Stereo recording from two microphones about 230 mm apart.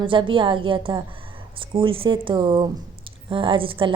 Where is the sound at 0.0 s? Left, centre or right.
Right.